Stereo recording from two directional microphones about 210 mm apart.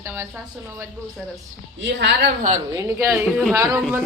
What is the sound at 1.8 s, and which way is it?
Speech, 55° right (ahead or behind).